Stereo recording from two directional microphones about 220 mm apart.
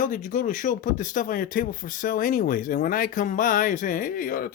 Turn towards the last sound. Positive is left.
turn(degrees=40)  # may be behind; listen again after turning